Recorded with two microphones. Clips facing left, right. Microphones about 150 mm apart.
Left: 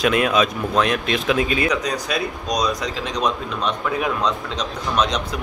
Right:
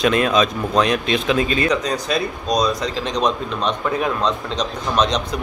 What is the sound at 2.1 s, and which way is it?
Speech, 30° right (ahead or behind).